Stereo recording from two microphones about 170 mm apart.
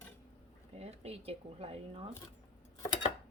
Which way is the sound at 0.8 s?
35° right (ahead or behind).